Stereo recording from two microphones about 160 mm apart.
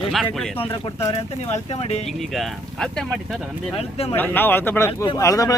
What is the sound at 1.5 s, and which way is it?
Speech, 40° left (ahead or behind).